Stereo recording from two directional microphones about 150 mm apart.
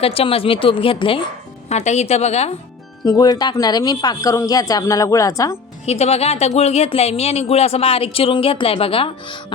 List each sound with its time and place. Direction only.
0.0 s a woman's voice: 40° left (ahead or behind)
1.7 s speech: 50° left (ahead or behind)
3.0 s a woman's voice: 25° left (ahead or behind)
5.8 s speech: 45° left (ahead or behind)